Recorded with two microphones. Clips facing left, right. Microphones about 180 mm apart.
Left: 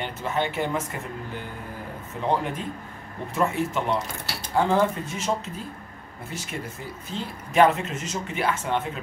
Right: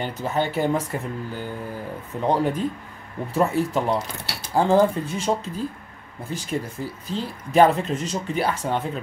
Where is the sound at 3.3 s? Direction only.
35° right (ahead or behind).